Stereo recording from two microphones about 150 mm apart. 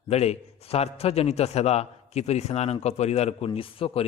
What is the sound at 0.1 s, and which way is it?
A man's voice, 45° left (ahead or behind).